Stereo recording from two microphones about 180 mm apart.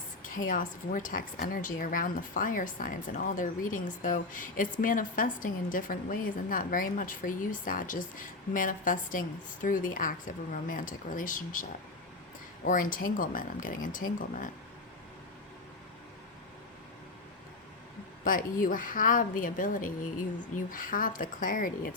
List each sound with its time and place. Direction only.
0.2 s a woman's voice: 50° left (ahead or behind)
12.6 s a woman's voice: 50° left (ahead or behind)
18.3 s a woman's voice: 50° left (ahead or behind)